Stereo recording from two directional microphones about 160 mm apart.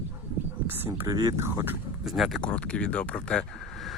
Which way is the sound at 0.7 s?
15° right (ahead or behind).